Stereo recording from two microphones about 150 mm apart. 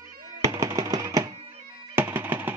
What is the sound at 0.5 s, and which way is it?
Music, 20° right (ahead or behind).